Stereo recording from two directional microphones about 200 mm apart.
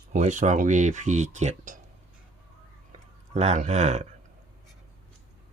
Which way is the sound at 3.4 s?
35° right (ahead or behind).